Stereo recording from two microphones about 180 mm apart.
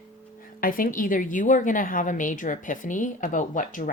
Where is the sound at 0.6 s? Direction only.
50° left (ahead or behind).